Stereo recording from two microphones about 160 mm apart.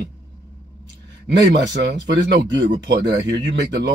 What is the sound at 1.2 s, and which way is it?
Speech, 90° right.